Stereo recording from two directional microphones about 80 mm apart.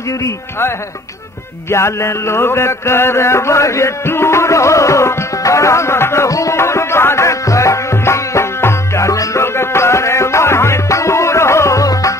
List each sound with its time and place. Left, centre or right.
0.2 s a man's voice: left
1.7 s music: left